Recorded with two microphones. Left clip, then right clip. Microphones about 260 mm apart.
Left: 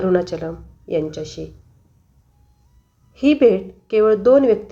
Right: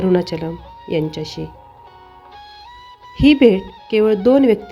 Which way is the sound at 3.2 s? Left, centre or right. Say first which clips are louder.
Right 2 dB; right.